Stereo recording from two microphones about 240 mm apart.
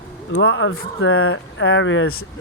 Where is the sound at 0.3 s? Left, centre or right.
Left.